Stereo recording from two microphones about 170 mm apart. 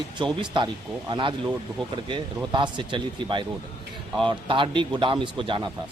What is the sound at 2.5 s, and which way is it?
A man's voice, 30° right (ahead or behind).